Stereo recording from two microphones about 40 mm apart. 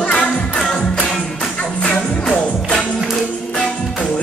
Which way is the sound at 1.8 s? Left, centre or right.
Left.